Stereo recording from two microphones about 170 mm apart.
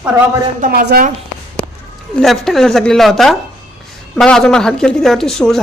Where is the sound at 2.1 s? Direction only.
Centre (ahead or behind).